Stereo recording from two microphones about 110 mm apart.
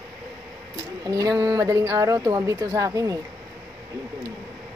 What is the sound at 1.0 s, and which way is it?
A woman's voice, 35° right (ahead or behind).